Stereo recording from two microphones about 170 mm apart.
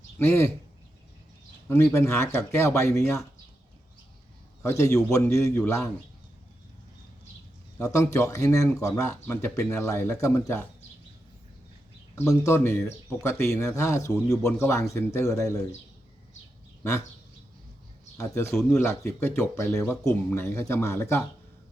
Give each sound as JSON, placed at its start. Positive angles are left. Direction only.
{"t": 0.3, "sound": "speech", "side_deg": 15}
{"t": 1.7, "sound": "speech", "side_deg": 15}
{"t": 4.6, "sound": "speech", "side_deg": 15}
{"t": 7.8, "sound": "speech", "side_deg": 20}
{"t": 12.1, "sound": "speech", "side_deg": 20}
{"t": 18.2, "sound": "speech", "side_deg": 15}